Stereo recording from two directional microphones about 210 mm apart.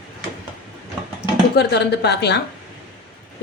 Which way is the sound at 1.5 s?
50° left (ahead or behind).